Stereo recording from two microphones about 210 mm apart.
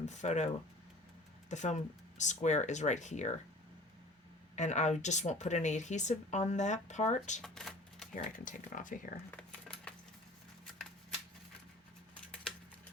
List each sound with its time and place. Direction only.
0.0 s a woman's voice: 35° left (ahead or behind)
4.5 s a woman's voice: 35° left (ahead or behind)
7.4 s typewriter: centre (ahead or behind)
8.1 s a woman's voice: 40° left (ahead or behind)
9.3 s a sound: 5° left (ahead or behind)